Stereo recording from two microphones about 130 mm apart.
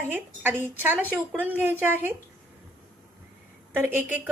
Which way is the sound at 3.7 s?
15° right (ahead or behind).